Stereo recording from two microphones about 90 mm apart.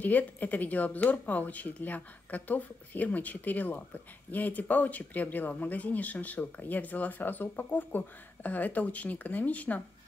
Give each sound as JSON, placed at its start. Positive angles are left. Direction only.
{"t": 0.0, "sound": "speech", "side_deg": 20}